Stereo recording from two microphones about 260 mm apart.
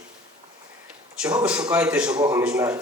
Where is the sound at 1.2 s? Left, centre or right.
Centre.